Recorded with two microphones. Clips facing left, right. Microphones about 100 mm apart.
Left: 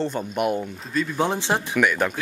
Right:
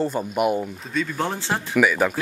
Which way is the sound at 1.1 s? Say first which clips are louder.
Left 3 dB; 20° left (ahead or behind).